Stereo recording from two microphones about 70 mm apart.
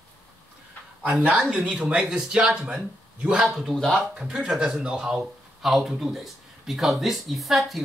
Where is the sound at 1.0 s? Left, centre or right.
Centre.